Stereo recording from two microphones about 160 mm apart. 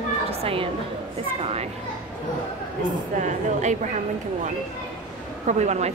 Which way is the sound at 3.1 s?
50° right (ahead or behind).